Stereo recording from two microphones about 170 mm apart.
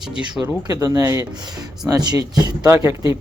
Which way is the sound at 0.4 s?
20° right (ahead or behind).